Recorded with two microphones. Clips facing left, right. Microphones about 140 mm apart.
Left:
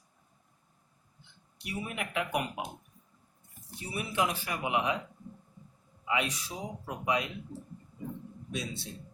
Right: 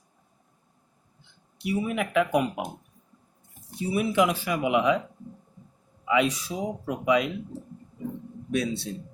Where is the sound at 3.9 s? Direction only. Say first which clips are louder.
Right 8 dB; 90° right.